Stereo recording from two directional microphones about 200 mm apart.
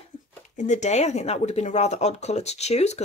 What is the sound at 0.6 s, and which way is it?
Speech, 35° left (ahead or behind).